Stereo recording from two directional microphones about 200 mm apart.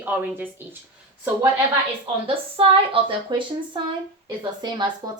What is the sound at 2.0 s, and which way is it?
A woman's voice, 25° right (ahead or behind).